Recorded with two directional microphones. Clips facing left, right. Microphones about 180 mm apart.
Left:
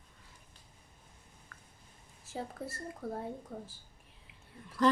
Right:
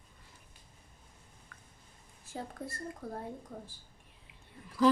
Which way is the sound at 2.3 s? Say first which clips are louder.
Left 1 dB; 5° left (ahead or behind).